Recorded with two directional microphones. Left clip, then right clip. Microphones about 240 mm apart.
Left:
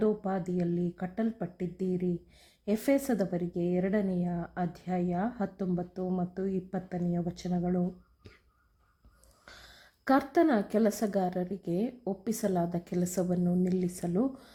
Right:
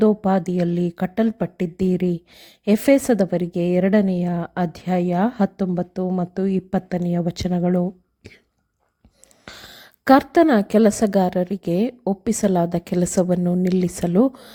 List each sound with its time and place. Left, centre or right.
0.0 s speech: right
9.5 s speech: right